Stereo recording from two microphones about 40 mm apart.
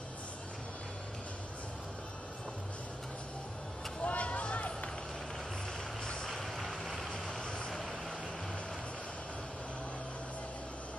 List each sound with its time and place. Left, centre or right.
4.0 s a sound: left
6.3 s vehicle: centre
7.3 s vehicle: centre